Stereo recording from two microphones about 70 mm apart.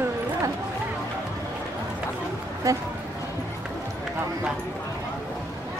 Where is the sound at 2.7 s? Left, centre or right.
Right.